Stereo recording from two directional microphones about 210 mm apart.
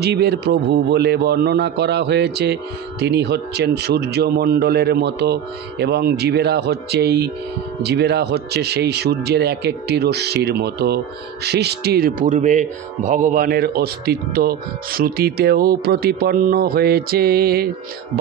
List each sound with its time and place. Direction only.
0.0 s a man's voice: 50° right (ahead or behind)